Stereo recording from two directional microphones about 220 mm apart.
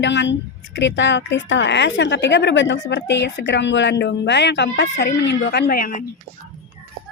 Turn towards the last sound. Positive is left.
turn(degrees=40)  # may be behind; listen again after turning